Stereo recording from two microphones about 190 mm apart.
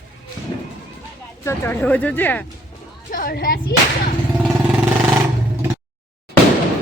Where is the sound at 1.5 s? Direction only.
10° left (ahead or behind).